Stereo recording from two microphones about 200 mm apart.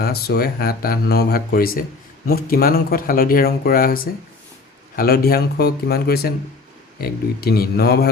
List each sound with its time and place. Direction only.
0.0 s speech: 50° left (ahead or behind)